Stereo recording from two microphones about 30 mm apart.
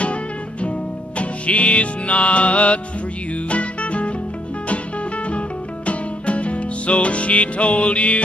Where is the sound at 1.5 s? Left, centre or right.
Left.